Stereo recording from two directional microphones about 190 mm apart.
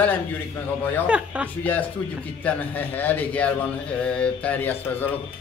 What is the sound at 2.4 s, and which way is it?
A man's voice, 10° left (ahead or behind).